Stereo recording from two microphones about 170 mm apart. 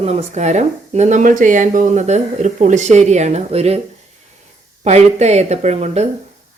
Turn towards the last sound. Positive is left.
turn(degrees=-40)  # may be behind; listen again after turning